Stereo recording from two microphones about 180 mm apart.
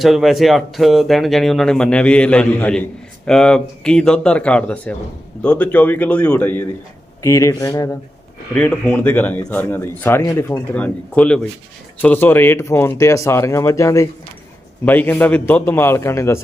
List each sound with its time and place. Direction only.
0.0 s speech: centre (ahead or behind); by 7.9 s 20° left (ahead or behind)
8.5 s speech: 5° left (ahead or behind)